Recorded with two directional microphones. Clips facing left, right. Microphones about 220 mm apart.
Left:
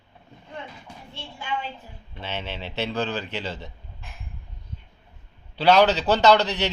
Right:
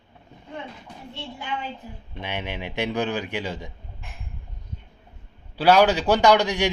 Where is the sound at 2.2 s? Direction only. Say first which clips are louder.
Right 2 dB; 15° right (ahead or behind).